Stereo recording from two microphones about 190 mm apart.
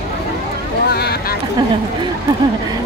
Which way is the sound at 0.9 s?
55° left (ahead or behind).